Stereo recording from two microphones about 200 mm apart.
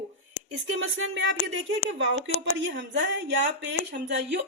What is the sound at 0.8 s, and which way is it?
Speech, 75° right (ahead or behind).